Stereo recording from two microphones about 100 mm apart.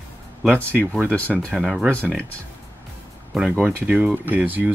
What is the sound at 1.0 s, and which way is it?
Speech, 15° left (ahead or behind).